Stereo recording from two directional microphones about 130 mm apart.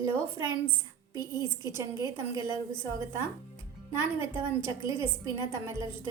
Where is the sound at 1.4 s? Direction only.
35° left (ahead or behind).